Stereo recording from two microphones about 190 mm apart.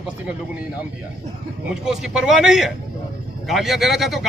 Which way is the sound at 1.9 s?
Centre (ahead or behind).